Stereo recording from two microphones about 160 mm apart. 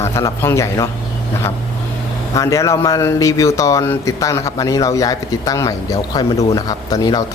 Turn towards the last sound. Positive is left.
turn(degrees=25)  # may be behind; listen again after turning